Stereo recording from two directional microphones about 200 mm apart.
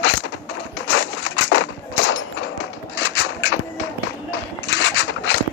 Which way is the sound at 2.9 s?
65° left (ahead or behind).